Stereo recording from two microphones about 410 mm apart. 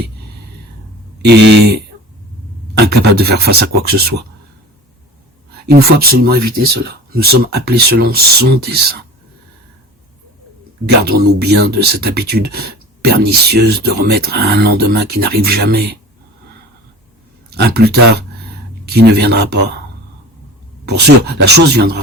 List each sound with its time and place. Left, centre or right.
1.3 s speech: right
5.6 s speech: right
10.8 s speech: right
17.6 s speech: right
20.8 s speech: right